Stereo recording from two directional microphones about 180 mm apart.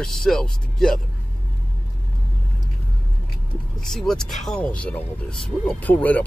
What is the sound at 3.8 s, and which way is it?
Speech, 5° left (ahead or behind).